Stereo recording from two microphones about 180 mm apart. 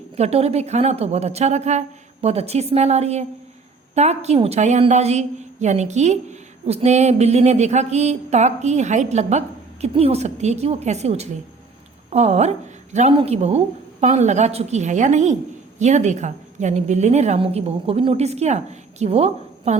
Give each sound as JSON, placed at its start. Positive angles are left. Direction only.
{"t": 0.2, "sound": "a woman's voice", "side_deg": -35}